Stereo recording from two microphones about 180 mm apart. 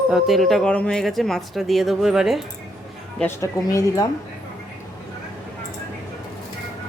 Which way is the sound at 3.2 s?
15° left (ahead or behind).